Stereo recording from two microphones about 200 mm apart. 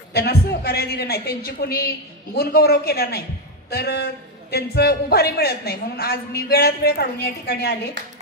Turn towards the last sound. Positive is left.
turn(degrees=55)  # may be behind; listen again after turning